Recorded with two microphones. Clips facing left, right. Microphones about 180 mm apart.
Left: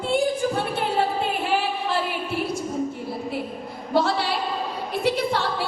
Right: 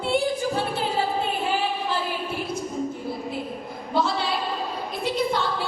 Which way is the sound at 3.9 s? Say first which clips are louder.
Left 2 dB; 70° left (ahead or behind).